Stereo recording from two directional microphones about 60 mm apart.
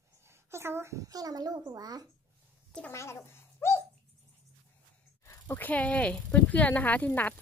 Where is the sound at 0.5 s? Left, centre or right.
Right.